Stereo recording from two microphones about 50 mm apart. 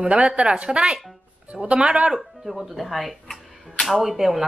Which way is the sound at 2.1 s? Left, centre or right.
Centre.